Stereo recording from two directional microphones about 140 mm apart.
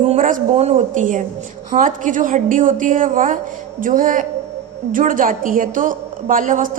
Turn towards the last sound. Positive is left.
turn(degrees=-70)  # may be behind; listen again after turning